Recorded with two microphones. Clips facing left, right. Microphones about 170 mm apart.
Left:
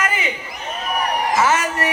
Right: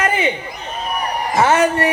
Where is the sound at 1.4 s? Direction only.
30° right (ahead or behind).